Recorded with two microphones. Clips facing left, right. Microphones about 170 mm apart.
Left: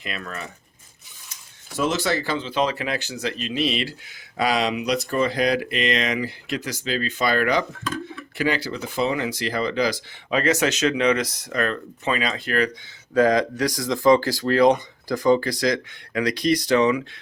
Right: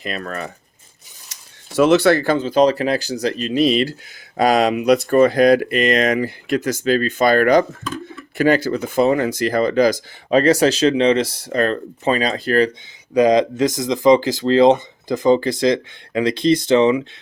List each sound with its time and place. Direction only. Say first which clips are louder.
0.0 s speech: right 6 dB; 40° right (ahead or behind)
1.3 s speech: right 2 dB; 70° right (ahead or behind); by 12.7 s 35° right (ahead or behind)
13.1 s speech: right 5 dB; 20° right (ahead or behind)